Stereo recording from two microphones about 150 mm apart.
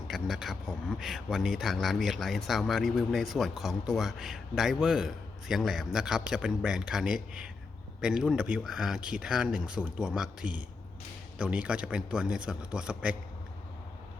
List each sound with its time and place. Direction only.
0.1 s a man's voice: centre (ahead or behind)